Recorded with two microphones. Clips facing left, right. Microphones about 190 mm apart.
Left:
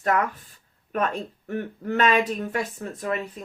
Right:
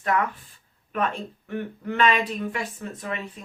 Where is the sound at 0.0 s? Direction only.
45° left (ahead or behind).